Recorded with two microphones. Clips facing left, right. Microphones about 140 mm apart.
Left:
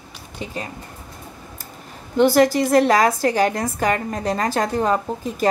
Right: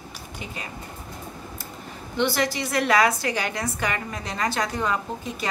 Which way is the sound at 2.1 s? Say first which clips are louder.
Left 9 dB; 45° left (ahead or behind).